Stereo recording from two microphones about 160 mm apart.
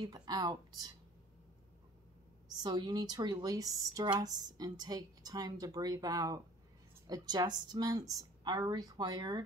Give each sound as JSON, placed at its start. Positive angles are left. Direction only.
{"t": 0.0, "sound": "speech", "side_deg": -25}
{"t": 2.5, "sound": "speech", "side_deg": -25}